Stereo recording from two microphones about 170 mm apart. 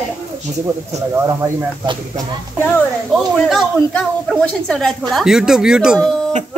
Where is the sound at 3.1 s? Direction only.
Centre (ahead or behind).